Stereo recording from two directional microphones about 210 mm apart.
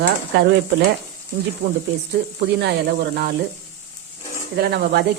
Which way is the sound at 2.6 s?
50° right (ahead or behind).